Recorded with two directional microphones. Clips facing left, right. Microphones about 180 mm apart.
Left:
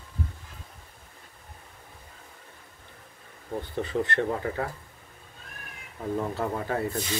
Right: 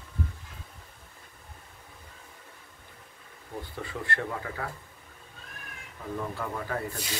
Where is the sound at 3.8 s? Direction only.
25° left (ahead or behind).